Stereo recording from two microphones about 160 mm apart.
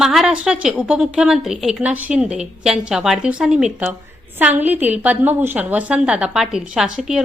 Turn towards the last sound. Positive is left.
turn(degrees=-5)  # may be behind; listen again after turning